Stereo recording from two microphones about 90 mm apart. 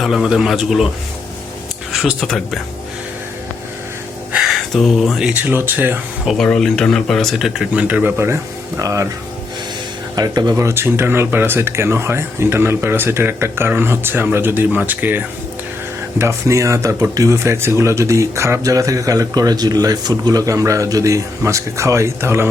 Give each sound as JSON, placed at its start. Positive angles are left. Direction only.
{"t": 0.0, "sound": "speech", "side_deg": -5}
{"t": 1.9, "sound": "speech", "side_deg": 0}
{"t": 4.7, "sound": "speech", "side_deg": 0}
{"t": 5.3, "sound": "speech", "side_deg": -20}
{"t": 6.2, "sound": "speech", "side_deg": 5}
{"t": 7.7, "sound": "speech", "side_deg": -15}
{"t": 8.8, "sound": "speech", "side_deg": -35}
{"t": 10.2, "sound": "speech", "side_deg": -45}
{"t": 10.6, "sound": "speech", "side_deg": -30}
{"t": 16.1, "sound": "speech", "side_deg": -30}